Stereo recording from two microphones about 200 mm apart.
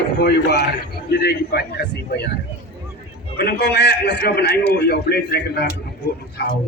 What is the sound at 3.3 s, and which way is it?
A man's voice, 55° left (ahead or behind).